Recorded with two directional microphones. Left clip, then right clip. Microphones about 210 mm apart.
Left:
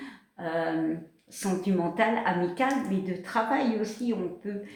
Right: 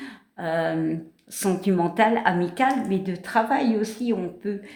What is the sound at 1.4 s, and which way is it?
Speech, 50° right (ahead or behind).